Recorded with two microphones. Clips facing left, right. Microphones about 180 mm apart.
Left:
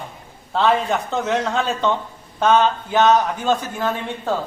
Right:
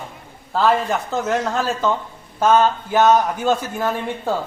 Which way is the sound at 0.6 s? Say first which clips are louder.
Even; centre (ahead or behind).